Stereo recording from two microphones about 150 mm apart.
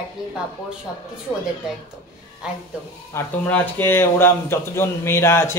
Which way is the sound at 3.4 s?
10° left (ahead or behind).